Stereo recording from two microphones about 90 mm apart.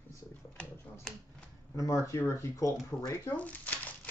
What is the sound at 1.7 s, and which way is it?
Speech, 35° left (ahead or behind).